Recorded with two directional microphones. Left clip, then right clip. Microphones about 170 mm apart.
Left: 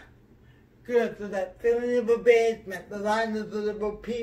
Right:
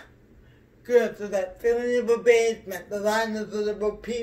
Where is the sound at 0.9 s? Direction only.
10° left (ahead or behind).